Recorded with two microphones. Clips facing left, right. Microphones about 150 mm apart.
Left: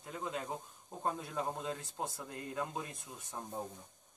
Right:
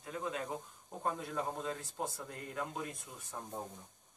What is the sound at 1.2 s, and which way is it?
Speech, 20° left (ahead or behind).